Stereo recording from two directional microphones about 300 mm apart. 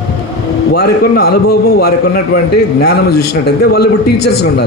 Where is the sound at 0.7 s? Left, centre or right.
Left.